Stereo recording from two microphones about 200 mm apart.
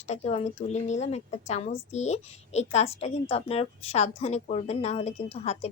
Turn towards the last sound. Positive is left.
turn(degrees=30)  # may be behind; listen again after turning